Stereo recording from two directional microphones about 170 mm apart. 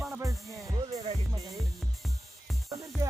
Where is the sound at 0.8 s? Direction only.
35° right (ahead or behind).